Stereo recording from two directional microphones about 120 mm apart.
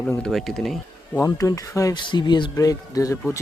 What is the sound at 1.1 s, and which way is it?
Speech, 30° left (ahead or behind).